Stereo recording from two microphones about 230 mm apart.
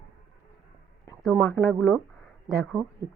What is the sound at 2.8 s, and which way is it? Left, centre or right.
Speech, centre.